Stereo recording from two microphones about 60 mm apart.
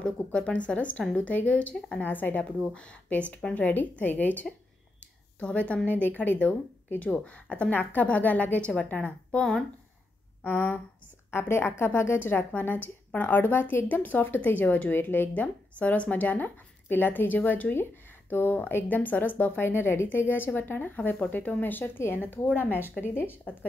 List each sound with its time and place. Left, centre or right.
0.0 s speech: centre
7.7 s speech: left
10.4 s a woman's voice: left
11.2 s a woman's voice: left